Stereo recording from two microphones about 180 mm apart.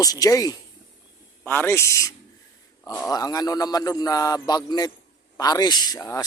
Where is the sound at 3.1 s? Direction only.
20° left (ahead or behind).